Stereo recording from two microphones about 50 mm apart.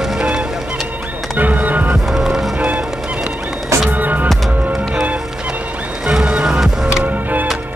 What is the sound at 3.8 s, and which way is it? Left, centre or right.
Music, right.